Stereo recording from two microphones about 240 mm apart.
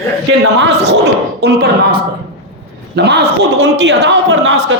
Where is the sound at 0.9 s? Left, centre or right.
Right.